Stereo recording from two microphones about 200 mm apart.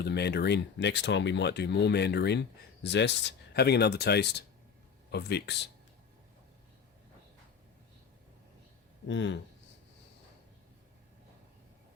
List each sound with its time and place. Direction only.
0.0 s speech: 55° left (ahead or behind)
9.0 s speech: 65° left (ahead or behind)